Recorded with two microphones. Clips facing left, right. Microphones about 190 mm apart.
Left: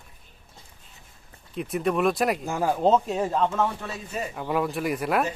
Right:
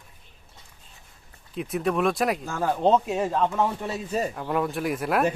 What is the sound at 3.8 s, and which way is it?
Speech, 35° right (ahead or behind).